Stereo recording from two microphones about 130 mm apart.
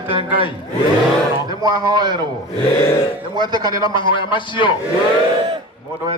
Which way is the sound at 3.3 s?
35° right (ahead or behind).